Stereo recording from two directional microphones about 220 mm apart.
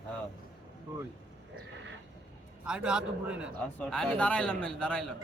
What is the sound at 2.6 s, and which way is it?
A man's voice, 5° right (ahead or behind).